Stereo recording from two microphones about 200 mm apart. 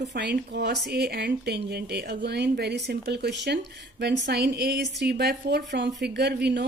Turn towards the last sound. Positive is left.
turn(degrees=-55)  # may be behind; listen again after turning